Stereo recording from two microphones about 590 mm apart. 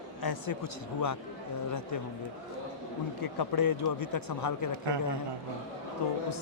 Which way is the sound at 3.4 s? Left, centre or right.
Left.